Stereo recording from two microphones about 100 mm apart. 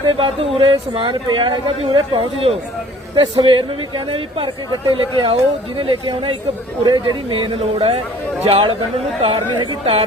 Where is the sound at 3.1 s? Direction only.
50° right (ahead or behind).